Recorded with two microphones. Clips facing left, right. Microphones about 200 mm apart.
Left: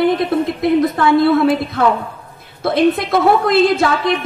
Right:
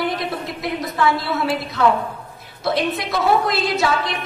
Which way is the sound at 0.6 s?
55° left (ahead or behind).